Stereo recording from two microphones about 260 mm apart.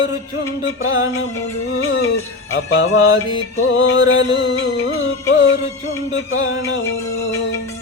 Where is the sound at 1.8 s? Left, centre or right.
Left.